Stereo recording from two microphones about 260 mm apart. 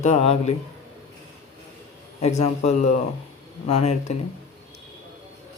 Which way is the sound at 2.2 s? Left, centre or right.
Left.